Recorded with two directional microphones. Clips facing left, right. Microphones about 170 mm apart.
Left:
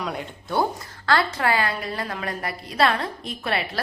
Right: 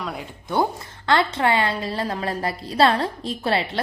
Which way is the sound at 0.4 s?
20° right (ahead or behind).